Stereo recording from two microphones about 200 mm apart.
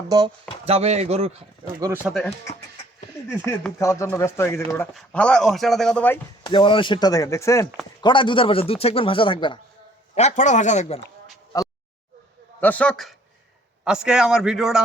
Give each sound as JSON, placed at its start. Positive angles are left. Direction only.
{"t": 0.6, "sound": "speech", "side_deg": -30}
{"t": 1.8, "sound": "speech", "side_deg": -10}
{"t": 3.8, "sound": "a man's voice", "side_deg": 15}
{"t": 6.4, "sound": "speech", "side_deg": 25}
{"t": 10.2, "sound": "speech", "side_deg": 35}
{"t": 11.5, "sound": "a sound", "side_deg": 20}
{"t": 12.5, "sound": "a man's voice", "side_deg": 10}